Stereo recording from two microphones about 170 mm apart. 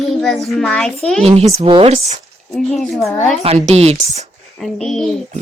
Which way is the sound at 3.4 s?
40° right (ahead or behind).